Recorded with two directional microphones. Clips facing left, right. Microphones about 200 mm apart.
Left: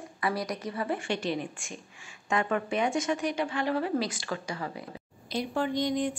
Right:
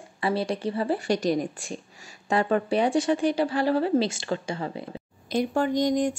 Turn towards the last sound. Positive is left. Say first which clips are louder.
# right 5 dB
turn(degrees=-45)  # may be behind; listen again after turning